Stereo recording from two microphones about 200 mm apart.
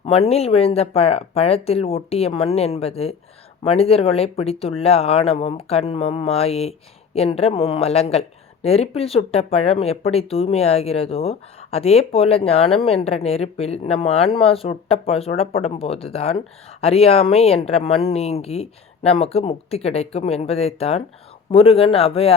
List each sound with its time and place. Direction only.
0.0 s speech: 30° left (ahead or behind)